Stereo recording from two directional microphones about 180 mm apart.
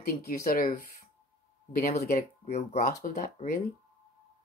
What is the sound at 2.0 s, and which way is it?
Speech, 40° left (ahead or behind).